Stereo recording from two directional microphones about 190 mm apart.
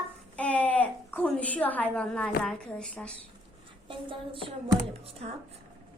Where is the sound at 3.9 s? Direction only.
25° right (ahead or behind).